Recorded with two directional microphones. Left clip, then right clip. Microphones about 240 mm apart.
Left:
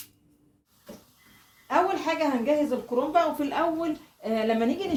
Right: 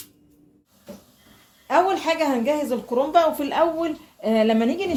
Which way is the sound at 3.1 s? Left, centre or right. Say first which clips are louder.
Right 6 dB; right.